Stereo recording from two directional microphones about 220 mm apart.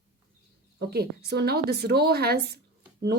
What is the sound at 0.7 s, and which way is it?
Speech, 45° right (ahead or behind).